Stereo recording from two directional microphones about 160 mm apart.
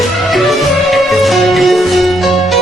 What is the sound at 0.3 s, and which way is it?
Music, centre (ahead or behind).